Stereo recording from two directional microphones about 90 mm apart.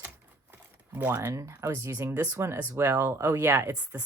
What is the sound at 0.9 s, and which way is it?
Speech, 25° right (ahead or behind).